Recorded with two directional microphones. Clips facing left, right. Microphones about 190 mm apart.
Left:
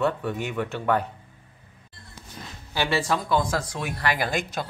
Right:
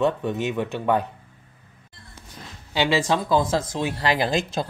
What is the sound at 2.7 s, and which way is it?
Speech, 20° right (ahead or behind).